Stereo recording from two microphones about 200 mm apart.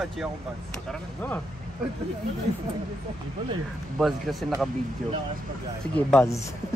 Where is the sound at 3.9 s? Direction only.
Centre (ahead or behind).